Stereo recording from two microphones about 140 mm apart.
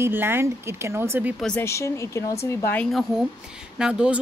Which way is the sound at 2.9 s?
Centre (ahead or behind).